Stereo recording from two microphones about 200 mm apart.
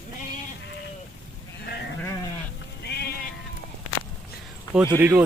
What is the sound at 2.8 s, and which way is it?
Sheep, 55° left (ahead or behind).